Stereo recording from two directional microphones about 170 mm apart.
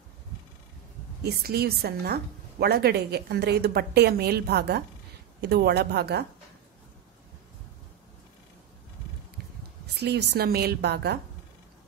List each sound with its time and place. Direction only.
1.2 s a woman's voice: 70° right (ahead or behind)
9.9 s a woman's voice: 75° right (ahead or behind)